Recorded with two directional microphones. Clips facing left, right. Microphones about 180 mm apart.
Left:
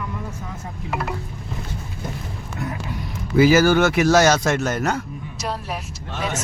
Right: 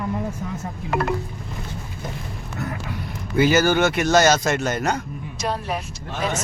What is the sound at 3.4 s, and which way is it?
A woman's voice, 5° left (ahead or behind).